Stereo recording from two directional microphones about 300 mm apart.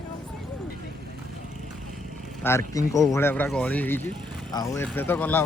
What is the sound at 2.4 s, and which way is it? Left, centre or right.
Speech, centre.